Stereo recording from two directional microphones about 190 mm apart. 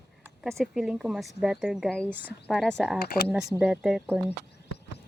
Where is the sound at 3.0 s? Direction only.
55° left (ahead or behind).